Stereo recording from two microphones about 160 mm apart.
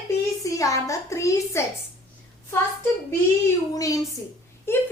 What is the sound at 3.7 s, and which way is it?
A woman's voice, 20° left (ahead or behind).